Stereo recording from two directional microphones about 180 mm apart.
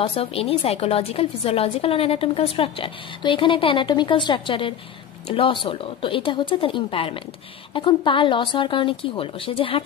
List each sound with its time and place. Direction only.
0.0 s a woman's voice: 30° left (ahead or behind)